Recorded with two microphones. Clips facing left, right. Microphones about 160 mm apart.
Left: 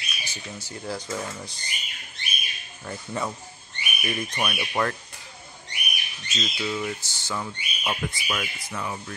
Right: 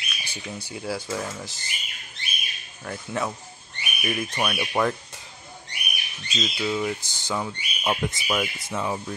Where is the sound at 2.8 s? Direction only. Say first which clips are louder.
Right 2 dB; centre (ahead or behind).